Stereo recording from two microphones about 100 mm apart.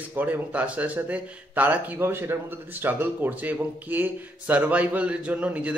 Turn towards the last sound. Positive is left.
turn(degrees=-15)  # may be behind; listen again after turning